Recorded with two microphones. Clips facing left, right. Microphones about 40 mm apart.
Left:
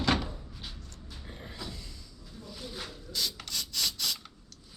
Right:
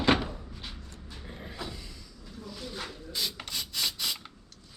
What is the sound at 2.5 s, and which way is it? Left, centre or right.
Mechanisms, centre.